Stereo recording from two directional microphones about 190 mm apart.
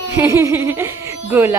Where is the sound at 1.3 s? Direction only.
10° right (ahead or behind).